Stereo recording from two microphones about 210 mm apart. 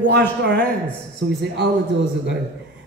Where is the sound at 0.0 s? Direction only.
55° right (ahead or behind).